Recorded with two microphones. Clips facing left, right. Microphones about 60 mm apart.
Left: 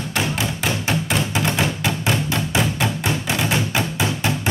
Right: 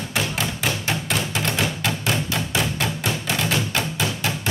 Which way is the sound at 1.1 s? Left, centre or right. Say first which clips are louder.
Left 3 dB; centre.